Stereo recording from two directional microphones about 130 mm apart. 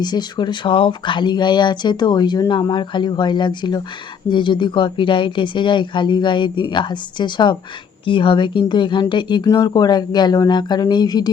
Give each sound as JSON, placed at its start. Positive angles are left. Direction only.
{"t": 0.0, "sound": "speech", "side_deg": 35}